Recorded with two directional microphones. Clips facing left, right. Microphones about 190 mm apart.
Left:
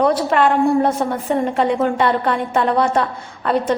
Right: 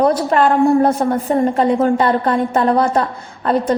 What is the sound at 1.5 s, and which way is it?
A woman's voice, 40° right (ahead or behind).